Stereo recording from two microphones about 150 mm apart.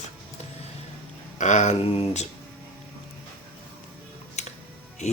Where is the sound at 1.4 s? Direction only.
50° left (ahead or behind).